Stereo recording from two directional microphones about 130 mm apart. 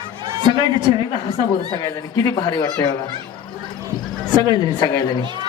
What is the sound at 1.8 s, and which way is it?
Speech, 30° left (ahead or behind).